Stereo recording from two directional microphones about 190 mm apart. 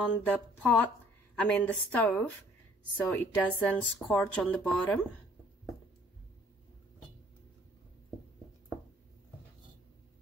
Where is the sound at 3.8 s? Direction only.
5° left (ahead or behind).